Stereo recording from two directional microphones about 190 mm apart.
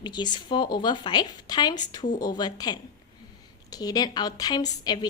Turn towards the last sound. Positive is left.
turn(degrees=20)  # may be behind; listen again after turning